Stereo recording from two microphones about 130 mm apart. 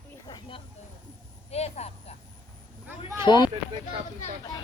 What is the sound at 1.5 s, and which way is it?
Speech, 55° left (ahead or behind).